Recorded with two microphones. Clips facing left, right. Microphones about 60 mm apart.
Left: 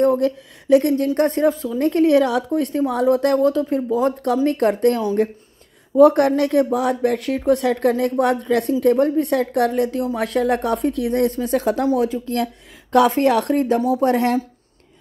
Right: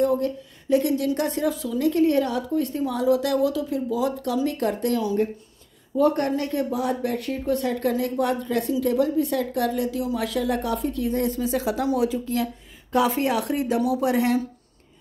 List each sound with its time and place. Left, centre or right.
0.0 s a woman's voice: left
1.8 s speech: left
2.8 s a woman's voice: left
5.9 s a woman's voice: left